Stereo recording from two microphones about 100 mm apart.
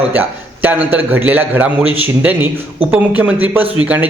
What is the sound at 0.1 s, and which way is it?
A man's voice, 20° right (ahead or behind).